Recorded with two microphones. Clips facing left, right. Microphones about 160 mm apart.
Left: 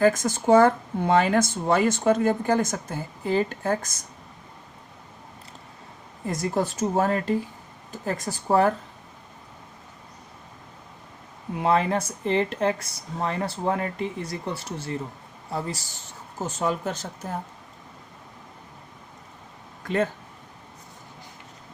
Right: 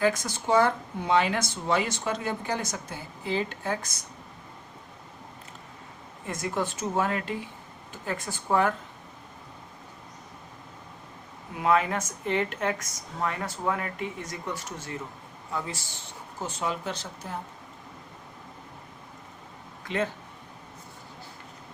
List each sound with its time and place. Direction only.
0.0 s speech: 50° left (ahead or behind)
6.2 s speech: 35° left (ahead or behind)
11.6 s speech: 30° left (ahead or behind)
19.8 s speech: 45° left (ahead or behind)